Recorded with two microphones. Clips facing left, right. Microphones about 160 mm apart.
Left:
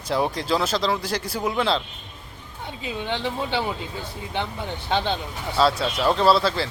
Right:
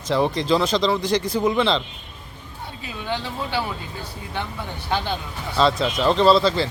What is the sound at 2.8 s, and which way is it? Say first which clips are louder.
Speech: left 1 dB; 20° left (ahead or behind).